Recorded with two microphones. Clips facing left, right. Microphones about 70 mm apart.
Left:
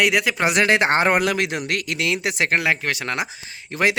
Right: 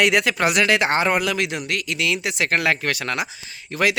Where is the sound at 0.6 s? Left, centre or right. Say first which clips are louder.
Left 3 dB; left.